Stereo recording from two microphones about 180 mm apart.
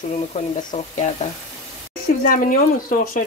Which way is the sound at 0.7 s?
40° left (ahead or behind).